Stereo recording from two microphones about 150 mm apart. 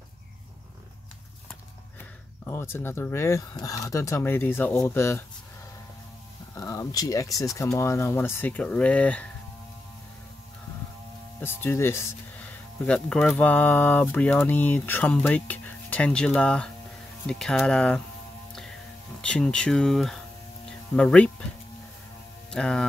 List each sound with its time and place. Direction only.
2.4 s speech: 15° left (ahead or behind)
6.5 s speech: 20° left (ahead or behind)
11.3 s speech: 15° left (ahead or behind)
19.2 s speech: 5° left (ahead or behind)
22.5 s speech: 5° left (ahead or behind)